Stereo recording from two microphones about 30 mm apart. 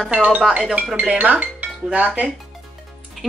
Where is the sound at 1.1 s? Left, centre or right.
Right.